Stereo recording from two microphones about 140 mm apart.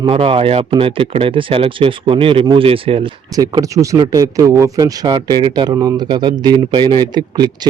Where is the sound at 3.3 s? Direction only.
25° right (ahead or behind).